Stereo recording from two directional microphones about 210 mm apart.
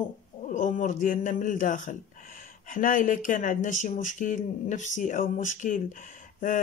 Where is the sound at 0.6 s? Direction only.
35° left (ahead or behind).